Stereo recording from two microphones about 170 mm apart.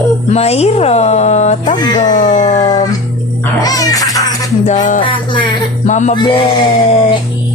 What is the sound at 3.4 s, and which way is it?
Music, 20° left (ahead or behind).